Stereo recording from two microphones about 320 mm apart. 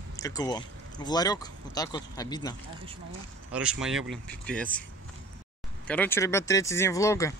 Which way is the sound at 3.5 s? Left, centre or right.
Centre.